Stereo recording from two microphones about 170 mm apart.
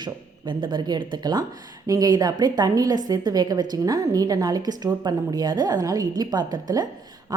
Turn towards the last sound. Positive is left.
turn(degrees=-25)  # may be behind; listen again after turning